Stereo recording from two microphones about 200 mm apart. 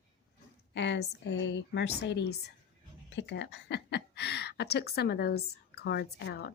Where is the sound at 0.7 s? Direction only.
60° left (ahead or behind).